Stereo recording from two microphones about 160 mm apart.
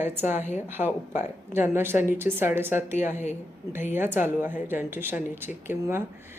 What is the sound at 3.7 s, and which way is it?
A woman's voice, 15° right (ahead or behind).